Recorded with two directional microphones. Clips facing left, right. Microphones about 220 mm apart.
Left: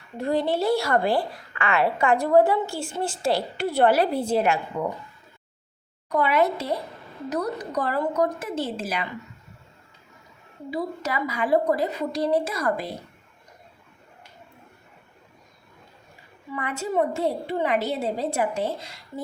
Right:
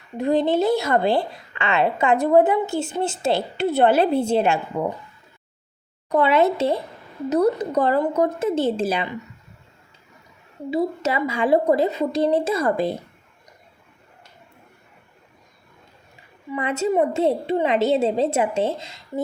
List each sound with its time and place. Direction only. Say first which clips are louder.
0.2 s a woman's voice: right 5 dB; 20° right (ahead or behind)
6.1 s a woman's voice: right 4 dB; 25° right (ahead or behind)
10.7 s a woman's voice: right 6 dB; 25° right (ahead or behind)
16.5 s a woman's voice: right 7 dB; 25° right (ahead or behind)